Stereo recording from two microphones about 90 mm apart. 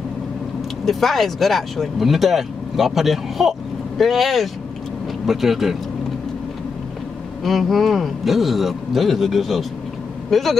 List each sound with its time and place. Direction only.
0.8 s speech: centre (ahead or behind)
7.4 s speech: centre (ahead or behind)